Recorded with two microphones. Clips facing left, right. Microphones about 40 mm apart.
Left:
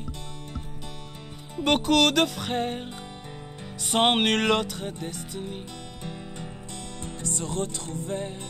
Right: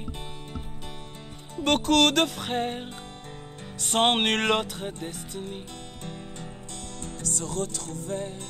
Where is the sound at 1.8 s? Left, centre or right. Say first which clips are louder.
Right 1 dB; centre.